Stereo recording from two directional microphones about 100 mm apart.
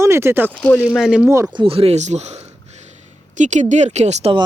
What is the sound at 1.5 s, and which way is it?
Speech, 60° right (ahead or behind).